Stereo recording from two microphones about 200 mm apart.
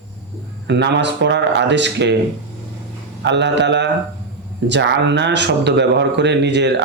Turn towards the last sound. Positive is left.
turn(degrees=-60)  # may be behind; listen again after turning